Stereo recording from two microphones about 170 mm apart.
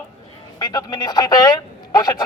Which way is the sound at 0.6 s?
25° left (ahead or behind).